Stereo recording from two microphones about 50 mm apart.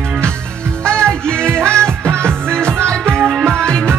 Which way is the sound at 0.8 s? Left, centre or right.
Centre.